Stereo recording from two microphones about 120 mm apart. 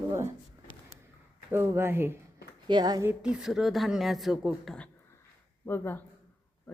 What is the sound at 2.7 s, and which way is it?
Speech, 35° right (ahead or behind).